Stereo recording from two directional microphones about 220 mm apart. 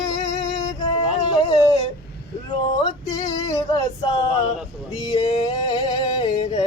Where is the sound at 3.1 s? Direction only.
15° left (ahead or behind).